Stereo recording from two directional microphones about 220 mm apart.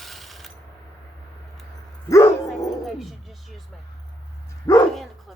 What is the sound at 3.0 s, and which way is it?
Speech, centre (ahead or behind).